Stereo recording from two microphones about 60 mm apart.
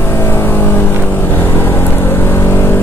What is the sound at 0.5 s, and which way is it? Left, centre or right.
Vehicle, left.